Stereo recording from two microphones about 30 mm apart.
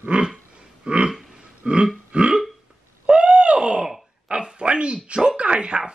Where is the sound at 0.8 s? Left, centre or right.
Right.